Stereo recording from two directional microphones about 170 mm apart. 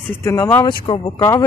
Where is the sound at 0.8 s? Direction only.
30° left (ahead or behind).